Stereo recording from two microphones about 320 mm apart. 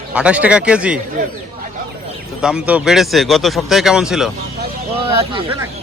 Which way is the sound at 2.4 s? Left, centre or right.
Centre.